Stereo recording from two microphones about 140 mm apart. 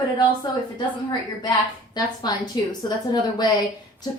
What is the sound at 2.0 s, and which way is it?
A woman's voice, 30° left (ahead or behind).